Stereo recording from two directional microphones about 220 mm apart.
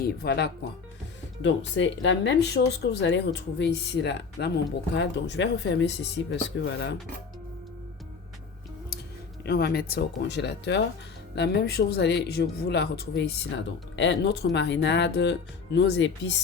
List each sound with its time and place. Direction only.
0.0 s speech: 45° left (ahead or behind)
9.4 s speech: 45° left (ahead or behind)